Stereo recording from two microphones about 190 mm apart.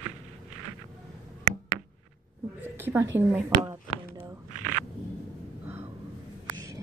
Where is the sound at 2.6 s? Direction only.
10° right (ahead or behind).